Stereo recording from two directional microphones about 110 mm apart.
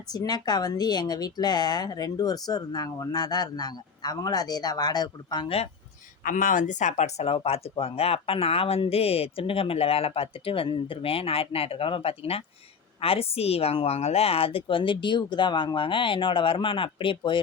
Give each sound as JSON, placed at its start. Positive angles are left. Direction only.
{"t": 0.1, "sound": "a man's voice", "side_deg": 40}
{"t": 6.7, "sound": "speech", "side_deg": 90}
{"t": 7.3, "sound": "a woman's voice", "side_deg": 65}